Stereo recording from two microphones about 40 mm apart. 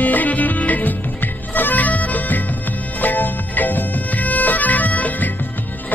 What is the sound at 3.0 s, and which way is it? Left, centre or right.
Bagpipes, left.